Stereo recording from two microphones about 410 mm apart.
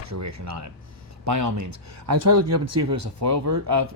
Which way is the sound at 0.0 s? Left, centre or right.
Right.